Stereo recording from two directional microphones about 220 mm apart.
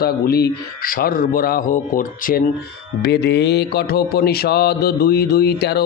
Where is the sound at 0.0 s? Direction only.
45° left (ahead or behind).